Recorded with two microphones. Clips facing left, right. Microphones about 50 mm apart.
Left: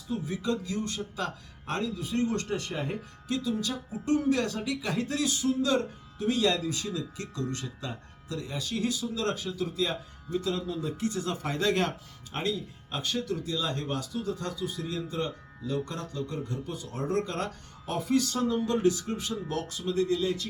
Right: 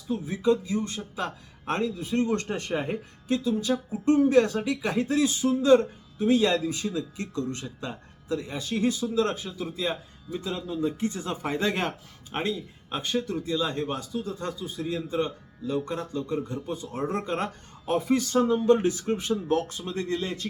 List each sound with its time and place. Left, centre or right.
0.1 s speech: right